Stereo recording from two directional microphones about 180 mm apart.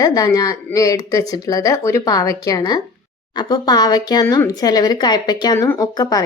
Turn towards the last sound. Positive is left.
turn(degrees=20)  # may be behind; listen again after turning